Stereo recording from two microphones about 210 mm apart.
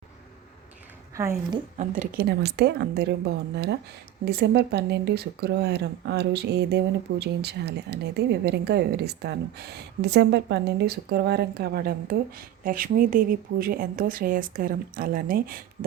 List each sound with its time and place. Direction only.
1.8 s speech: 45° right (ahead or behind)